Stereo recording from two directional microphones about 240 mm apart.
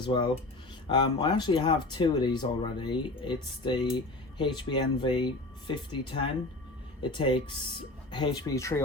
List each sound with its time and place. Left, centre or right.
0.0 s speech: centre